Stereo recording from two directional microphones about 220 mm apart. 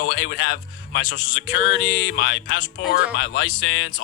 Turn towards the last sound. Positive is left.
turn(degrees=55)  # may be behind; listen again after turning